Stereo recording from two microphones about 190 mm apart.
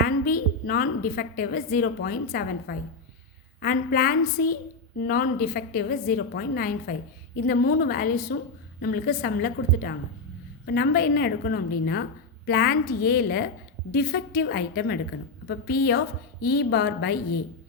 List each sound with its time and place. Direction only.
0.0 s a woman's voice: 50° left (ahead or behind)